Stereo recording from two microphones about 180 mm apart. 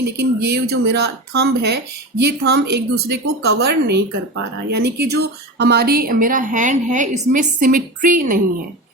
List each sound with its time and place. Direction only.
0.0 s speech: 65° right (ahead or behind); by 8.4 s 50° right (ahead or behind)